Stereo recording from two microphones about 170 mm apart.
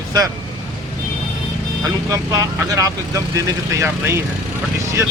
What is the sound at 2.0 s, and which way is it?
Speech, 20° right (ahead or behind).